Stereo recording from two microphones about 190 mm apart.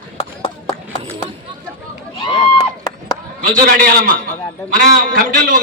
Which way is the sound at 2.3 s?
20° left (ahead or behind).